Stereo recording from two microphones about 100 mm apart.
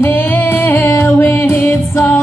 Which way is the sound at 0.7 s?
25° left (ahead or behind).